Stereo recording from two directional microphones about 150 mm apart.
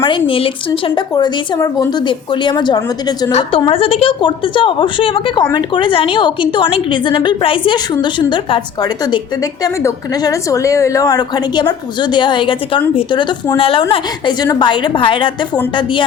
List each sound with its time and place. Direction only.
0.3 s speech: 35° left (ahead or behind)
3.7 s a woman's voice: 40° left (ahead or behind)